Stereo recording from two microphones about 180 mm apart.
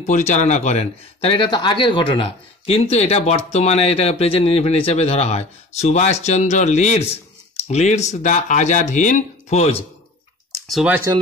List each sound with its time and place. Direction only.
0.0 s speech: 40° left (ahead or behind)
10.7 s speech: 5° right (ahead or behind)